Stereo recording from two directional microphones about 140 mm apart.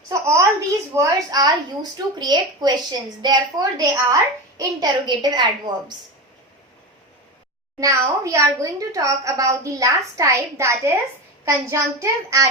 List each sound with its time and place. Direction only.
0.1 s a woman's voice: 20° right (ahead or behind)
7.8 s a woman's voice: 25° right (ahead or behind)